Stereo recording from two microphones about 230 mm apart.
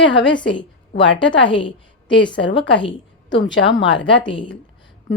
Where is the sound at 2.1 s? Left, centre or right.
Left.